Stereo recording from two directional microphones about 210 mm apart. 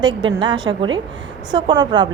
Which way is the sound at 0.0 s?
20° right (ahead or behind).